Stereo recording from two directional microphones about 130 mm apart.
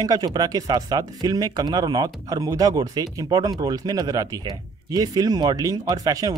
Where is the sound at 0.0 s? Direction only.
30° right (ahead or behind).